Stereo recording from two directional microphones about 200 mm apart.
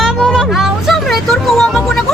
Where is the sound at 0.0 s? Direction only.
Centre (ahead or behind).